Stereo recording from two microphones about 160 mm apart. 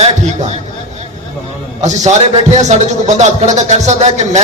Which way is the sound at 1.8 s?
45° right (ahead or behind).